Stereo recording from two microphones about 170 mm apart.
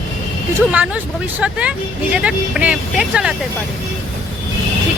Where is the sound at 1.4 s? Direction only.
5° right (ahead or behind).